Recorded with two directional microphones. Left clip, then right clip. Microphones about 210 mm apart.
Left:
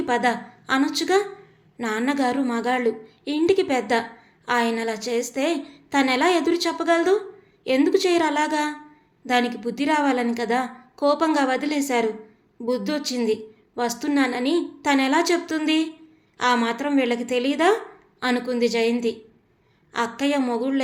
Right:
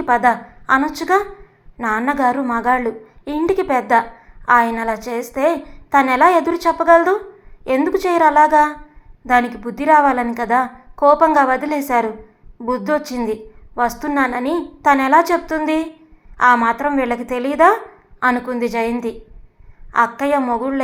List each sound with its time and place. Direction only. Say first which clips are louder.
0.0 s a woman's voice: right 7 dB; centre (ahead or behind)